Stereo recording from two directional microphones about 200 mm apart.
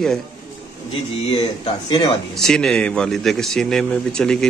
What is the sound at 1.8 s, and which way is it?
Speech, 25° left (ahead or behind).